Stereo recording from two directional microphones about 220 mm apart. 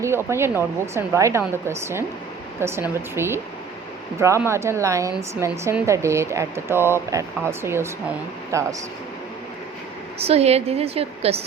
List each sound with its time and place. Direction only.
0.0 s speech: 10° right (ahead or behind)
10.2 s a woman's voice: 25° right (ahead or behind)